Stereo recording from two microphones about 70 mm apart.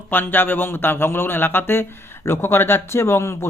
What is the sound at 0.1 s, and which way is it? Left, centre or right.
Speech, left.